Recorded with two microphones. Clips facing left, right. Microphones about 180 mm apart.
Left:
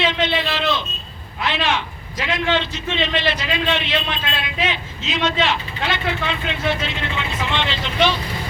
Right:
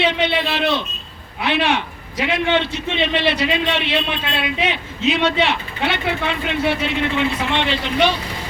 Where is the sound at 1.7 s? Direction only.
60° right (ahead or behind).